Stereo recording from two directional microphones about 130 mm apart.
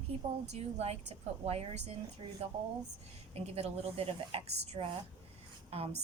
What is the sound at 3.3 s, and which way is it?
A woman's voice, 50° right (ahead or behind).